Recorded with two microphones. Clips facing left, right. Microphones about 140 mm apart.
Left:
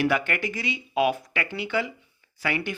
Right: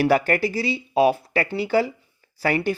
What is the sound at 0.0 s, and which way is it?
Speech, 40° right (ahead or behind).